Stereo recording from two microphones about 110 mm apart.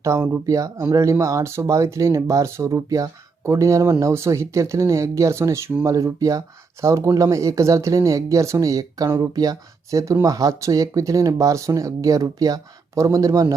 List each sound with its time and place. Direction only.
0.0 s speech: 25° right (ahead or behind)